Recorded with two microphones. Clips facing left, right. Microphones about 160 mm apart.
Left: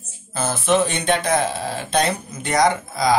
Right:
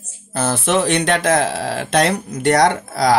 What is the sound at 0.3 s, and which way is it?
Speech, 75° right (ahead or behind).